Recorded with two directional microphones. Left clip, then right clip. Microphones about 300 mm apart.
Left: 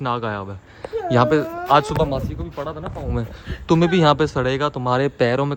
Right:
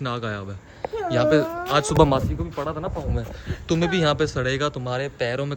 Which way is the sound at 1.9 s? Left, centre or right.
Right.